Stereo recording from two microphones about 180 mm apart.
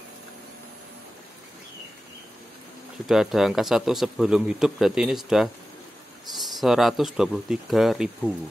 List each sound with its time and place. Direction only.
3.1 s a man's voice: centre (ahead or behind)
6.6 s a man's voice: centre (ahead or behind)